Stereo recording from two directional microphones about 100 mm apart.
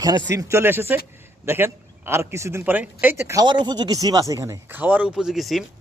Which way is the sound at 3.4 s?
50° right (ahead or behind).